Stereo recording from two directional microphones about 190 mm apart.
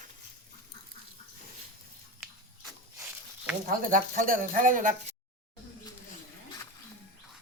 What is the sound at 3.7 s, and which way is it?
Speech, 45° right (ahead or behind).